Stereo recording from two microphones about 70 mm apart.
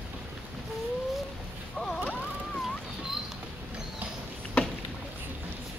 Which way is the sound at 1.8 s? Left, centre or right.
Centre.